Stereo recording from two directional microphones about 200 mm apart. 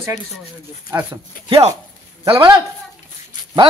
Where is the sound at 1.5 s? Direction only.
25° right (ahead or behind).